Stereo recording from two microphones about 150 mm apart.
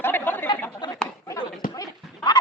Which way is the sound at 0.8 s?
30° left (ahead or behind).